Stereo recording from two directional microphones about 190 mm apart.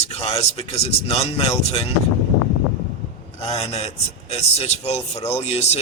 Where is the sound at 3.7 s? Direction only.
35° left (ahead or behind).